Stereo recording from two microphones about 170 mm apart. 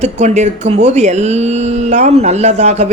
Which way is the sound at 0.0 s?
40° right (ahead or behind).